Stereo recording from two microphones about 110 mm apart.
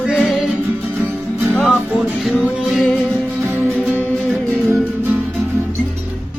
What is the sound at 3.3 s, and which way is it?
Music, 15° right (ahead or behind).